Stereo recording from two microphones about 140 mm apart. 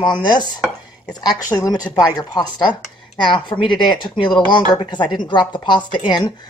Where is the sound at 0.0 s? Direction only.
35° left (ahead or behind).